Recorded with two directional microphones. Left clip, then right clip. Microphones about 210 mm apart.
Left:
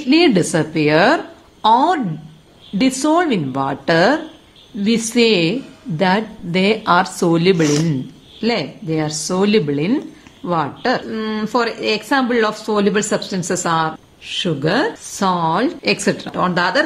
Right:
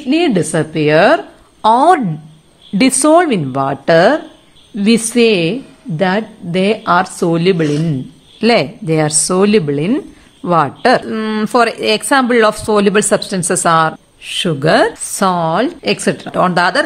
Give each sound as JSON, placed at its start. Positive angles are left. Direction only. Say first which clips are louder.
{"t": 0.1, "sound": "a woman's voice", "louder": "even", "side_deg": -15}
{"t": 8.4, "sound": "speech", "louder": "right 8 dB", "side_deg": -30}